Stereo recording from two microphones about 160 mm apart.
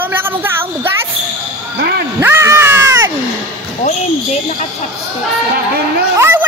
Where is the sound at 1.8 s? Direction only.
90° right.